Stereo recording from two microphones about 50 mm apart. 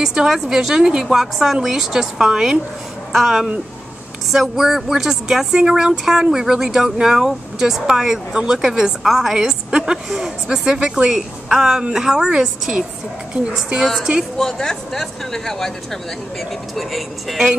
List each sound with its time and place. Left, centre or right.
0.0 s speech: centre
9.7 s a woman's voice: centre
10.0 s speech: centre
14.4 s speech: centre